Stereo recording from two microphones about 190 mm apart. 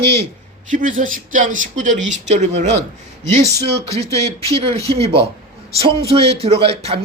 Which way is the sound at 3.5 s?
60° right (ahead or behind).